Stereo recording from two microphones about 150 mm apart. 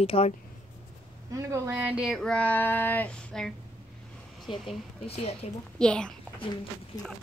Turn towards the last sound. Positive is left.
turn(degrees=5)  # may be behind; listen again after turning